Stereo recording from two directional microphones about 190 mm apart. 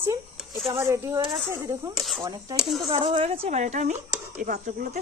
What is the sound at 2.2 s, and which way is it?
Speech, 20° right (ahead or behind).